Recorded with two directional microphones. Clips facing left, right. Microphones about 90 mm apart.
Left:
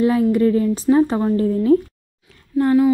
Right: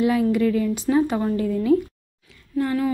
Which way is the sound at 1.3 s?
35° left (ahead or behind).